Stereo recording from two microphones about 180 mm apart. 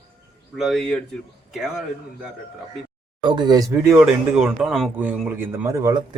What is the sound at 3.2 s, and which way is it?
Speech, 25° right (ahead or behind).